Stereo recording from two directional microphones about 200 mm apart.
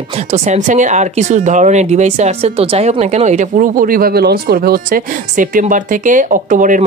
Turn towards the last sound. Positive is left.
turn(degrees=-40)  # may be behind; listen again after turning